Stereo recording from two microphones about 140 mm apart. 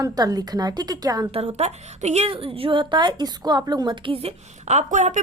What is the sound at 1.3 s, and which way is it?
A woman's voice, 50° right (ahead or behind).